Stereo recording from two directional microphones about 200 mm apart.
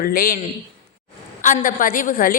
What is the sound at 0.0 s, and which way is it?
Speech, 50° left (ahead or behind).